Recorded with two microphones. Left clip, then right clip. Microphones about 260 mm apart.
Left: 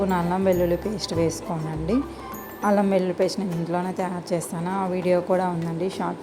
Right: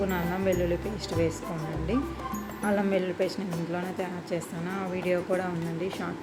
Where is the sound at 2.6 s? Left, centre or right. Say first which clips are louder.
Left 6 dB; centre.